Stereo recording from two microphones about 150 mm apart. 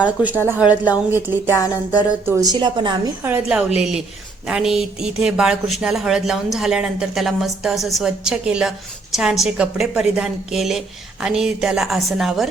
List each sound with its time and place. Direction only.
0.0 s speech: 10° right (ahead or behind)
1.5 s a sound: 20° left (ahead or behind)
2.2 s a woman's voice: 20° right (ahead or behind)
3.2 s speech: 10° right (ahead or behind)